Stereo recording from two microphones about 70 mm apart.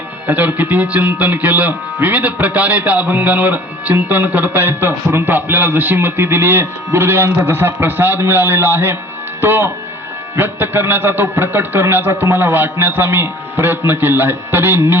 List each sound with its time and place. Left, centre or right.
0.3 s speech: right